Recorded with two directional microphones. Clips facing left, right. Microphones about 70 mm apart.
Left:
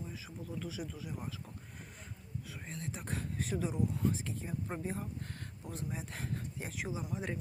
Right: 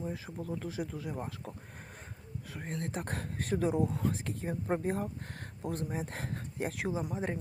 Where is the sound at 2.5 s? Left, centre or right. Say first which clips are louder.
Right 8 dB; right.